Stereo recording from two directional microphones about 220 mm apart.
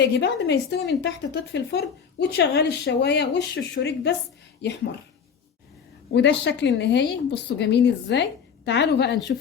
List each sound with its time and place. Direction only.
0.0 s a woman's voice: 50° left (ahead or behind)
6.1 s a woman's voice: 50° left (ahead or behind)